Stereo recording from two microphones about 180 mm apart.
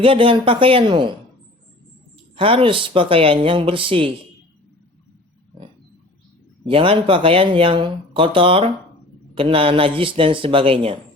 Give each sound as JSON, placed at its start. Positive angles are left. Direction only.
{"t": 0.0, "sound": "speech", "side_deg": -30}
{"t": 2.3, "sound": "speech", "side_deg": -30}
{"t": 6.7, "sound": "speech", "side_deg": -30}